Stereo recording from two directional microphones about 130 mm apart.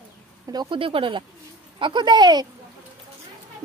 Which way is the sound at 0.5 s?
35° right (ahead or behind).